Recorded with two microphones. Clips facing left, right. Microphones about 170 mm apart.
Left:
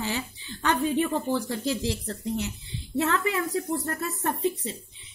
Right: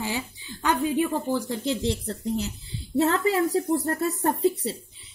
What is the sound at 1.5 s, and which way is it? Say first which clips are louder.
A woman's voice: right 2 dB; 25° right (ahead or behind).